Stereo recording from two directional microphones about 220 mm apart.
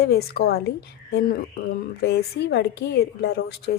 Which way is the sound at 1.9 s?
50° left (ahead or behind).